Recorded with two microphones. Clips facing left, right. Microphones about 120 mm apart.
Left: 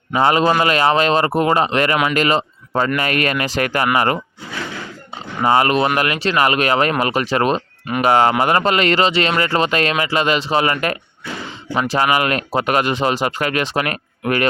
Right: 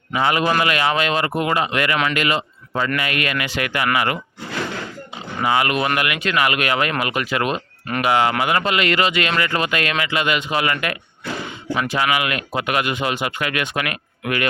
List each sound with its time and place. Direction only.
0.1 s speech: 30° left (ahead or behind)
5.4 s speech: 40° left (ahead or behind)